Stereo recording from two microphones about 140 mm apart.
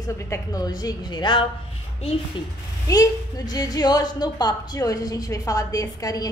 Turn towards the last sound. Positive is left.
turn(degrees=25)  # may be behind; listen again after turning